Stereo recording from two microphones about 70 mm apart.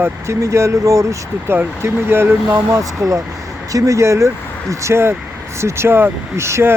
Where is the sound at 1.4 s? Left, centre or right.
Right.